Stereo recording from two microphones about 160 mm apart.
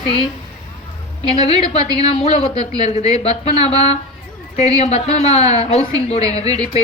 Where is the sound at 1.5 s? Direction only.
40° left (ahead or behind).